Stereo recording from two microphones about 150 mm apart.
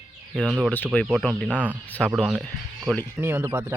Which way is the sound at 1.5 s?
10° right (ahead or behind).